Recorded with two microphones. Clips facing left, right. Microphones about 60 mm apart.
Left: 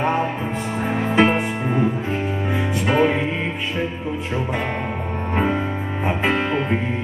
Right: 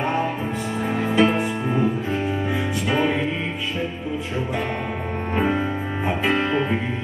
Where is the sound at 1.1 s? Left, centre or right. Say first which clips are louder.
Left 2 dB; left.